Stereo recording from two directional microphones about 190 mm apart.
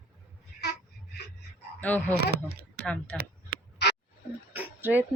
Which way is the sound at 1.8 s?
10° left (ahead or behind).